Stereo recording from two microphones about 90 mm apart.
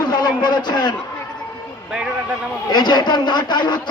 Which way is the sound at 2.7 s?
55° left (ahead or behind).